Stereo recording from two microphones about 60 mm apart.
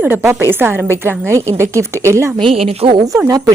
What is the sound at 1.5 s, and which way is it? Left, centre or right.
Speech, right.